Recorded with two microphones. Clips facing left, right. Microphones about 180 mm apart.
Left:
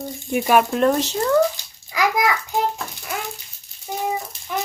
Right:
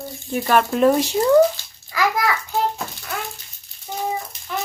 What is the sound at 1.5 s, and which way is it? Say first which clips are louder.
Bathtub: even; 15° left (ahead or behind).